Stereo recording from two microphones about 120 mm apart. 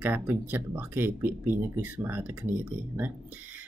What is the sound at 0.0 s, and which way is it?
Speech, 15° right (ahead or behind).